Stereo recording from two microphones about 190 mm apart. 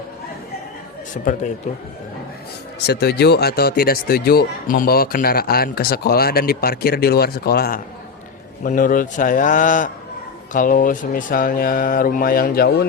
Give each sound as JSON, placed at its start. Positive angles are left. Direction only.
{"t": 1.1, "sound": "speech", "side_deg": 45}
{"t": 2.8, "sound": "speech", "side_deg": 60}